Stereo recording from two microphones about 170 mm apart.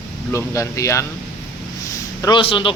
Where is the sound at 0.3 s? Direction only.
15° left (ahead or behind).